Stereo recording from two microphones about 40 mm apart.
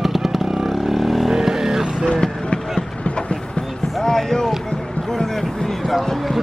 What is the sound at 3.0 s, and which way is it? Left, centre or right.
Train, left.